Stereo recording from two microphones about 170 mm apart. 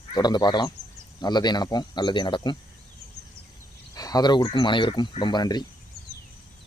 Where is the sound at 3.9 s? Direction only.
20° left (ahead or behind).